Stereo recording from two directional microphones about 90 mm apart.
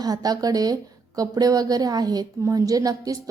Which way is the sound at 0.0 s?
45° right (ahead or behind).